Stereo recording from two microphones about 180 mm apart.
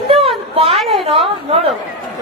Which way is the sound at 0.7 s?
Centre (ahead or behind).